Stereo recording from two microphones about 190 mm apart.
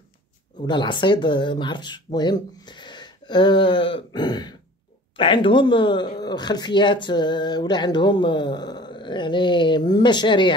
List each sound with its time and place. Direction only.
0.7 s speech: 25° left (ahead or behind)